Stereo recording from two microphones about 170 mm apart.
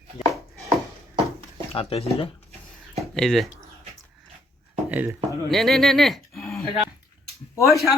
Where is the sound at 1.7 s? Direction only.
35° left (ahead or behind).